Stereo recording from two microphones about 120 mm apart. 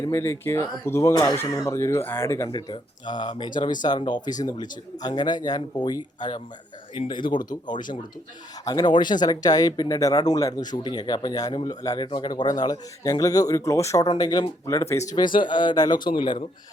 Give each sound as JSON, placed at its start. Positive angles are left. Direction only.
{"t": 0.0, "sound": "speech", "side_deg": 20}
{"t": 2.5, "sound": "speech", "side_deg": 35}